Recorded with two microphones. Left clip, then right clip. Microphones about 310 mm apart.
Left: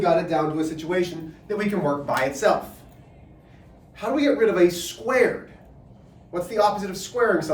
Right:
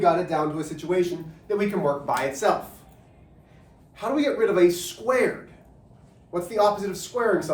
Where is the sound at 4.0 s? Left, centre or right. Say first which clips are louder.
Left 2 dB; centre.